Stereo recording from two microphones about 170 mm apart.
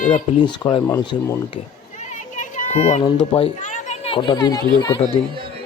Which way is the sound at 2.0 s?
45° left (ahead or behind).